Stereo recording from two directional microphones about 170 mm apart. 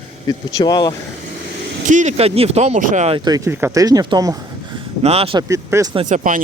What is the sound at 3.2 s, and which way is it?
Speech, 20° right (ahead or behind).